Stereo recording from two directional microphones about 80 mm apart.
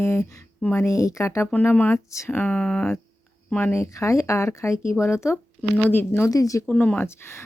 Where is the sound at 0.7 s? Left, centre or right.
Left.